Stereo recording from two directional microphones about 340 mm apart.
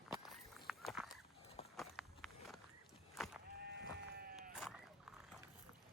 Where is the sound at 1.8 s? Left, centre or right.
Centre.